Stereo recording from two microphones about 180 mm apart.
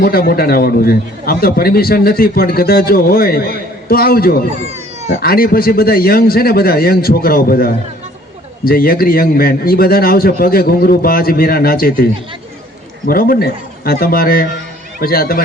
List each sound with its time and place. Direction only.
0.0 s a man's voice: 55° left (ahead or behind)
13.1 s a man's voice: 55° left (ahead or behind)